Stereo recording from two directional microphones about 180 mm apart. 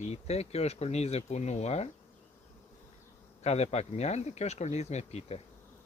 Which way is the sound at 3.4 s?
35° left (ahead or behind).